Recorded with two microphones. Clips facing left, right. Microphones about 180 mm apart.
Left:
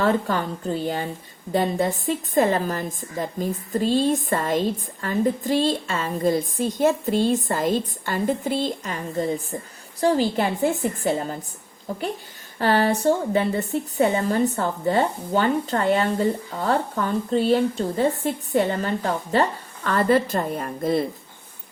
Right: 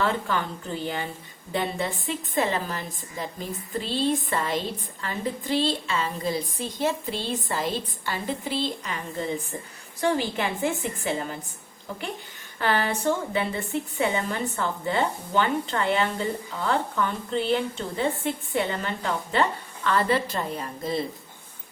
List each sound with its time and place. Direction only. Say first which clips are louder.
0.0 s a woman's voice: left 4 dB; 40° left (ahead or behind)